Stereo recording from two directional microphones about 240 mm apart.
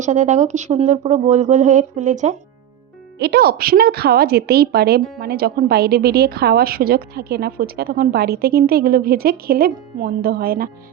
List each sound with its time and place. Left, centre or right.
0.0 s speech: right
3.2 s a woman's voice: right